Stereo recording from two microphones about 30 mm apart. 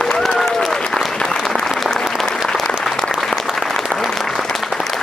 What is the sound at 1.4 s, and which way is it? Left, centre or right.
Applause, centre.